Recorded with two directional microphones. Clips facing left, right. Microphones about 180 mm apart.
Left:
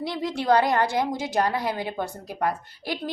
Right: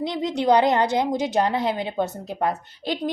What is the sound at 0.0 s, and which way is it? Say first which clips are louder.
A woman's voice: right 4 dB; 20° right (ahead or behind).